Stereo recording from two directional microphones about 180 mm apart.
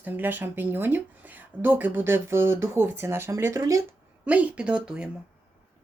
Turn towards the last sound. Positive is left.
turn(degrees=-5)  # may be behind; listen again after turning